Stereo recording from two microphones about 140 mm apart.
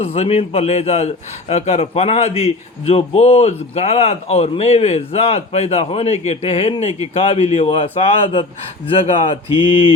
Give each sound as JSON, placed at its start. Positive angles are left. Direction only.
{"t": 0.0, "sound": "a man's voice", "side_deg": 45}